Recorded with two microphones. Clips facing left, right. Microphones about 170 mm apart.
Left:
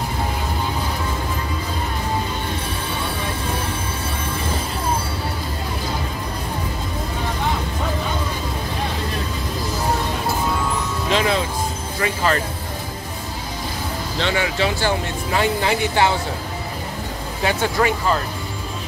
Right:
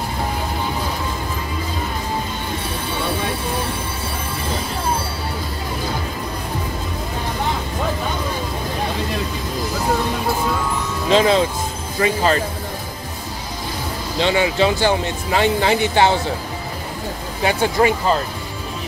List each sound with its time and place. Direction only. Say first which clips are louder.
11.1 s music: right 5 dB; 30° right (ahead or behind)
12.0 s speech: right 4 dB; 25° right (ahead or behind)
14.2 s speech: right 5 dB; 20° right (ahead or behind)
17.5 s speech: right 3 dB; 25° right (ahead or behind)